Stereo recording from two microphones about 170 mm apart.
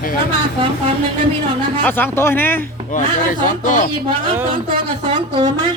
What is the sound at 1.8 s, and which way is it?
Speech, 10° left (ahead or behind).